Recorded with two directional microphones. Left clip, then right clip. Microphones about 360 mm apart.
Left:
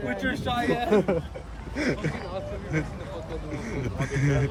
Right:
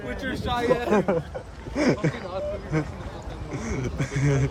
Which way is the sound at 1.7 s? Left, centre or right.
Centre.